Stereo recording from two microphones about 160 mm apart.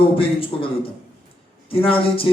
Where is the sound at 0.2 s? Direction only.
35° left (ahead or behind).